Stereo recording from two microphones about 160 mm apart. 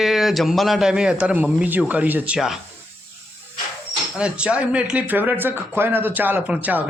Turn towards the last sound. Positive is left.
turn(degrees=-10)  # may be behind; listen again after turning